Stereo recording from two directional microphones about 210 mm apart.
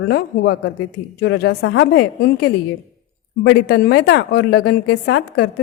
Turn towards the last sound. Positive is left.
turn(degrees=55)  # may be behind; listen again after turning